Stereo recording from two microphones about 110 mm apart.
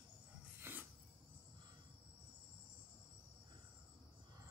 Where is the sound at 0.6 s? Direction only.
20° right (ahead or behind).